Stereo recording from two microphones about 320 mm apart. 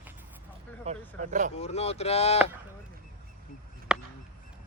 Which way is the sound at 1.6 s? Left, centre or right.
Centre.